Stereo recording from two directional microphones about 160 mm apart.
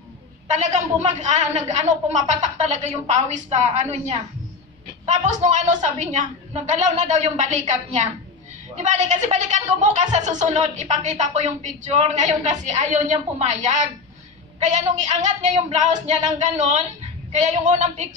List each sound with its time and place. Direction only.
0.5 s a woman's voice: 45° right (ahead or behind)